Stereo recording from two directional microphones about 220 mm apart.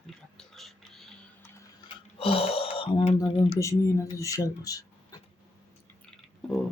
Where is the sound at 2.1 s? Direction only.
25° left (ahead or behind).